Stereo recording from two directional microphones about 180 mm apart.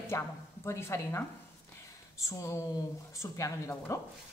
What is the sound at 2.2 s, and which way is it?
Speech, 15° left (ahead or behind).